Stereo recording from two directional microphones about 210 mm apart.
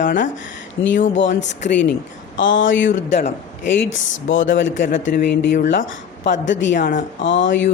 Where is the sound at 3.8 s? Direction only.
65° left (ahead or behind).